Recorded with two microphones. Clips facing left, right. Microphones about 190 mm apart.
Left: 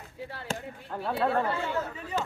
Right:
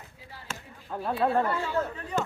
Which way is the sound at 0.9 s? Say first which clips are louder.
Right 1 dB; 10° right (ahead or behind).